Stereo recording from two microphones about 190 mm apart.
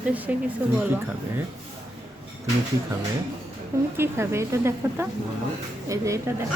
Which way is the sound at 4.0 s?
15° right (ahead or behind).